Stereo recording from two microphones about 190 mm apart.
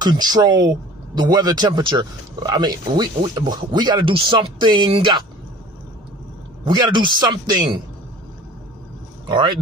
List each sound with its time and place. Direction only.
0.0 s speech: 20° right (ahead or behind)
6.6 s speech: 25° right (ahead or behind)
9.3 s speech: 25° right (ahead or behind)